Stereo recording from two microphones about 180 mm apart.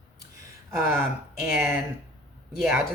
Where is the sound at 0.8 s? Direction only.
15° right (ahead or behind).